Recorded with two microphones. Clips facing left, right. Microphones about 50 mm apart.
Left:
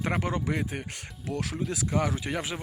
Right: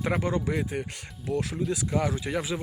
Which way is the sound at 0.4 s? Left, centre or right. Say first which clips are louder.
Right 2 dB; left.